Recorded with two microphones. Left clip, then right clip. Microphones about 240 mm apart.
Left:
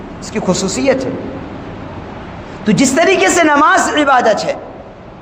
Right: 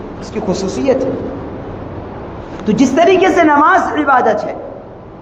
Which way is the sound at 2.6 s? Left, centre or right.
Left.